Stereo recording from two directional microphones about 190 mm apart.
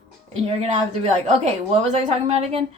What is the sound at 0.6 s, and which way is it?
A woman's voice, 35° right (ahead or behind).